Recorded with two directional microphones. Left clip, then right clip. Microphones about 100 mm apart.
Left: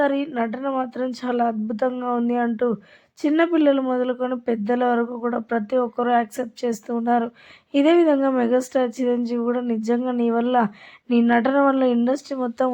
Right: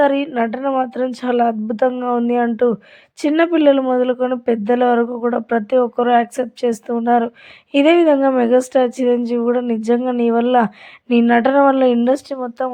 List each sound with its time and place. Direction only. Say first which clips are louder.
0.0 s speech: right 6 dB; 30° right (ahead or behind)